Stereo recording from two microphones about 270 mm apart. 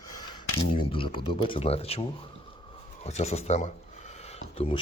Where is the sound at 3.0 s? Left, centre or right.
Left.